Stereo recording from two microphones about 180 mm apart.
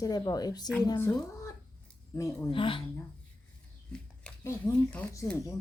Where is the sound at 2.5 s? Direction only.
30° left (ahead or behind).